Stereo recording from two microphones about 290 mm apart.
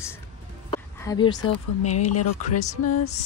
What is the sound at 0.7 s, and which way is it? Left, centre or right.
Music, centre.